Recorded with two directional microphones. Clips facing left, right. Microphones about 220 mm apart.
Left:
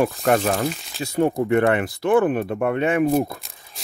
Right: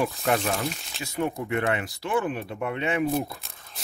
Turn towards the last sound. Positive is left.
turn(degrees=50)  # may be behind; listen again after turning